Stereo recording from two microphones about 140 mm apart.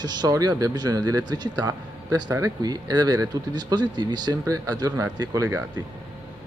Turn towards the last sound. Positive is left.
turn(degrees=-25)  # may be behind; listen again after turning